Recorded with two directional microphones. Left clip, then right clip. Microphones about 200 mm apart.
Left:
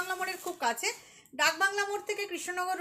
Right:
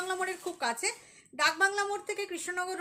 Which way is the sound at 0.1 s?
20° right (ahead or behind).